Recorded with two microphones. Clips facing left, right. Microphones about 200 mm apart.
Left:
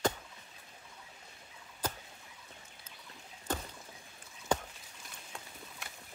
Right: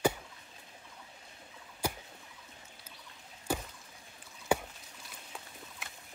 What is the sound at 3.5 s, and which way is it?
Chop, 10° right (ahead or behind).